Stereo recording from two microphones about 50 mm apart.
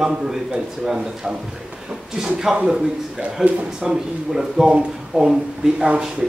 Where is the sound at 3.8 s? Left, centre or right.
Centre.